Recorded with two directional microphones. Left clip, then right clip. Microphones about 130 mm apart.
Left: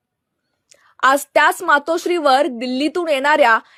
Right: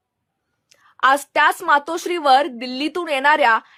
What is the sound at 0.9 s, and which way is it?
Speech, 30° left (ahead or behind).